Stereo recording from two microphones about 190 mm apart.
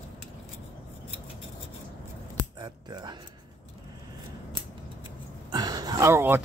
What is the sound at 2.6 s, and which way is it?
Speech, 20° right (ahead or behind).